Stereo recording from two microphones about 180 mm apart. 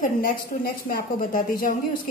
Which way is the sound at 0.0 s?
50° left (ahead or behind).